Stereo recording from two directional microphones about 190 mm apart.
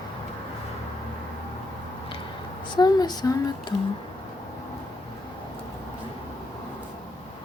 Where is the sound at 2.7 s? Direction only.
20° left (ahead or behind).